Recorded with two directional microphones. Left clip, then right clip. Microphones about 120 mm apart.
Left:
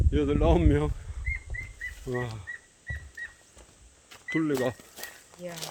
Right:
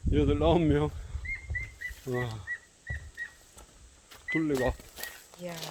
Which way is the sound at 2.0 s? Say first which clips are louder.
Even; centre (ahead or behind).